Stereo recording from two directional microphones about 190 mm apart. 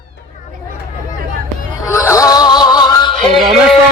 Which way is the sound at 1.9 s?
15° left (ahead or behind).